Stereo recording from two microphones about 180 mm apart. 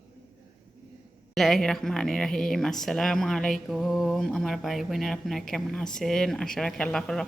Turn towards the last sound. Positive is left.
turn(degrees=5)  # may be behind; listen again after turning